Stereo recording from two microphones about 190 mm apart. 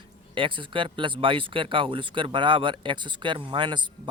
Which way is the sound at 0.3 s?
25° right (ahead or behind).